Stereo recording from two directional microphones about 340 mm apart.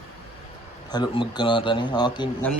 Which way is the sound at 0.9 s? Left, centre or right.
Centre.